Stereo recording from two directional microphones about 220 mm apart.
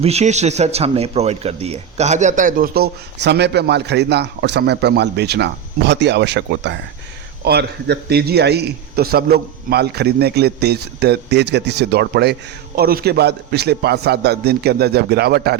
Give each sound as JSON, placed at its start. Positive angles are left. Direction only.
{"t": 0.0, "sound": "a man's voice", "side_deg": -30}